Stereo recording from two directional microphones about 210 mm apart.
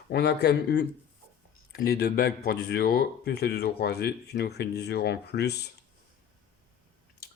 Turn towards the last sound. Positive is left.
turn(degrees=50)  # may be behind; listen again after turning